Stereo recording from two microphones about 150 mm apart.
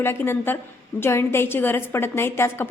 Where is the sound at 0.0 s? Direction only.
15° left (ahead or behind).